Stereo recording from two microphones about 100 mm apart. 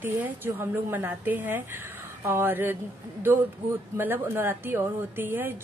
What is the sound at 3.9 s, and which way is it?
A woman's voice, 20° right (ahead or behind).